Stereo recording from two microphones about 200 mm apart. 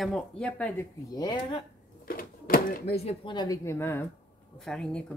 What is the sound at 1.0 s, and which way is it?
Speech, 20° left (ahead or behind).